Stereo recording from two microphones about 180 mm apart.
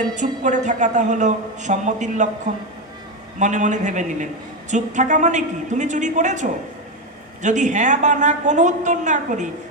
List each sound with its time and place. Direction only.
0.1 s a man's voice: 45° right (ahead or behind)
3.3 s a man's voice: 45° right (ahead or behind)